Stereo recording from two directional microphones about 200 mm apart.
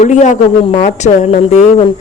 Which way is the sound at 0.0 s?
35° left (ahead or behind).